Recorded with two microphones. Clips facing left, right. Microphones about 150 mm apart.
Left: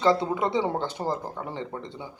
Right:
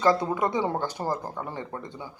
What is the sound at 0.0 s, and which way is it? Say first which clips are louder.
Speech: even; 20° left (ahead or behind).